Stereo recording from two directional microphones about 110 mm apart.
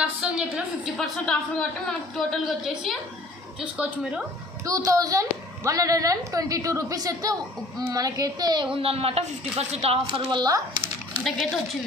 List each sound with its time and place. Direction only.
0.2 s a woman's voice: 10° right (ahead or behind)
0.9 s a woman's voice: 5° left (ahead or behind); by 4.2 s 10° right (ahead or behind)
4.6 s a woman's voice: 30° right (ahead or behind)
8.7 s a man's voice: 60° right (ahead or behind)
10.3 s a woman's voice: 40° right (ahead or behind)
10.8 s a sound: centre (ahead or behind)